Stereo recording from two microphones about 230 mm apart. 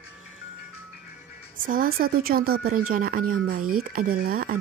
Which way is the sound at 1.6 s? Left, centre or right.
Right.